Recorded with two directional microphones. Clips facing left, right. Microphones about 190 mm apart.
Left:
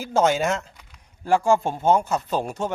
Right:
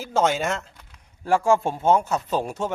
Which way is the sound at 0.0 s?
Centre (ahead or behind).